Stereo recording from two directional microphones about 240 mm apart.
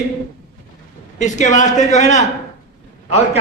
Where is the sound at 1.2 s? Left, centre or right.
Left.